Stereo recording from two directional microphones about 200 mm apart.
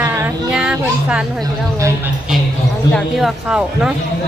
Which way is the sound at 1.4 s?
15° right (ahead or behind).